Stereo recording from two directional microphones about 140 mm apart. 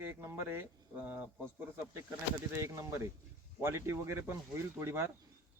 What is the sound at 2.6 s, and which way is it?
Speech, 20° right (ahead or behind).